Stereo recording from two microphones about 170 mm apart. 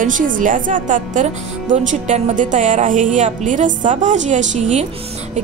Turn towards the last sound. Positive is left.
turn(degrees=-40)  # may be behind; listen again after turning